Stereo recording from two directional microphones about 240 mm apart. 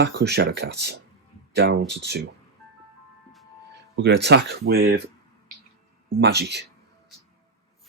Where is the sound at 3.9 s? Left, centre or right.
Right.